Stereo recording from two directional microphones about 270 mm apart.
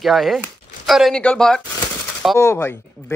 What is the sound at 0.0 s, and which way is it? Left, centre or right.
A man's voice, centre.